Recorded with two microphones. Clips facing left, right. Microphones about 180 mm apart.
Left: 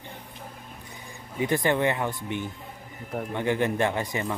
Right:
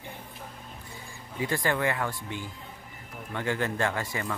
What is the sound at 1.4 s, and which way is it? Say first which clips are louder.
A man's voice: left 4 dB; 20° left (ahead or behind).